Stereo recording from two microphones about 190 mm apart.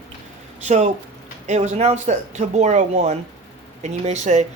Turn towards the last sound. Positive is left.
turn(degrees=-40)  # may be behind; listen again after turning